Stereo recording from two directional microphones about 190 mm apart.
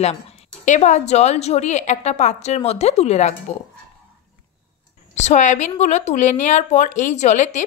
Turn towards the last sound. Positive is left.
turn(degrees=40)  # may be behind; listen again after turning